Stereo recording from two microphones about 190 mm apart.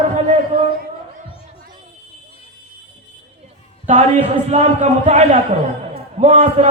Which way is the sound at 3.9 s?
35° right (ahead or behind).